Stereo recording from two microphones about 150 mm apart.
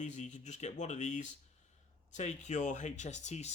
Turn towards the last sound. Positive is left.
turn(degrees=50)  # may be behind; listen again after turning